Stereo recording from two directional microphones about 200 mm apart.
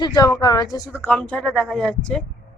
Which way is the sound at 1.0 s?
5° left (ahead or behind).